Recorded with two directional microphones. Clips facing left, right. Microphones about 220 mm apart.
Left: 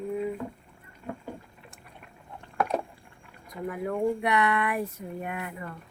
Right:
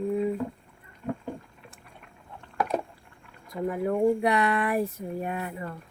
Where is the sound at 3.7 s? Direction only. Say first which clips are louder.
Right 4 dB; 30° right (ahead or behind).